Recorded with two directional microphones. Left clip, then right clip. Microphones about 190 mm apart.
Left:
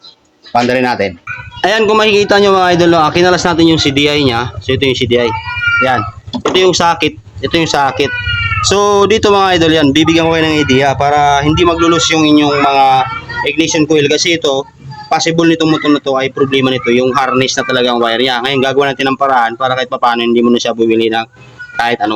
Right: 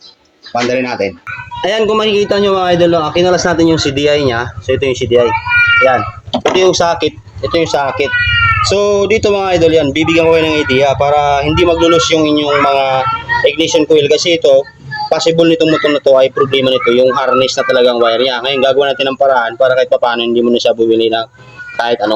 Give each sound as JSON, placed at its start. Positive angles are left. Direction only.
{"t": 0.5, "sound": "speech", "side_deg": 55}
{"t": 6.4, "sound": "speech", "side_deg": 40}